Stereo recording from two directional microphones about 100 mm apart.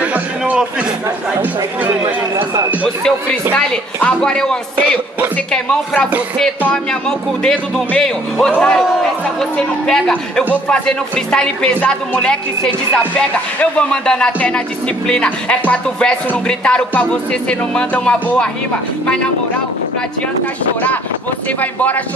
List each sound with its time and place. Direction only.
0.0 s a sound: 15° right (ahead or behind)
1.4 s speech: 20° right (ahead or behind)
2.8 s speech: 10° left (ahead or behind)
21.5 s speech: 15° left (ahead or behind)